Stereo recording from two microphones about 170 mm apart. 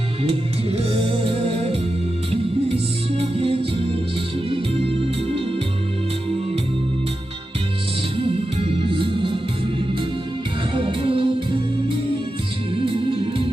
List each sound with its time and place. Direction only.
0.9 s music: 30° right (ahead or behind)
8.2 s music: 35° right (ahead or behind)
10.8 s music: 30° right (ahead or behind)